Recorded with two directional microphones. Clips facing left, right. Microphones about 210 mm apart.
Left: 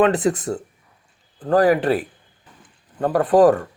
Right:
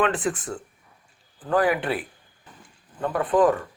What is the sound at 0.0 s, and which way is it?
Speech, 40° left (ahead or behind).